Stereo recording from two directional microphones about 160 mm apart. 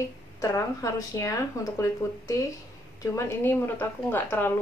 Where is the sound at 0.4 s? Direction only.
20° left (ahead or behind).